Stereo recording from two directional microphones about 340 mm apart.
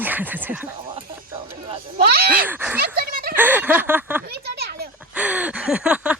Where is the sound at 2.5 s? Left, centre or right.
Centre.